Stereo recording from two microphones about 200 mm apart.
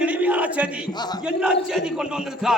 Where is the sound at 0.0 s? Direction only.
5° right (ahead or behind).